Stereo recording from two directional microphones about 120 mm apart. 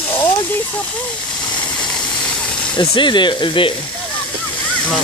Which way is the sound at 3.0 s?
40° left (ahead or behind).